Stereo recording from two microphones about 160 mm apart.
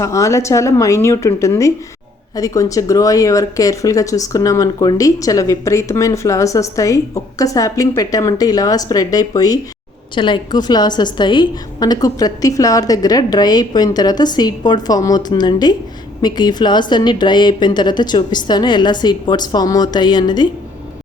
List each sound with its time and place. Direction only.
0.0 s speech: 20° left (ahead or behind)